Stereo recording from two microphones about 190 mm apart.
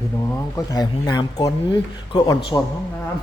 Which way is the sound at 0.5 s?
20° left (ahead or behind).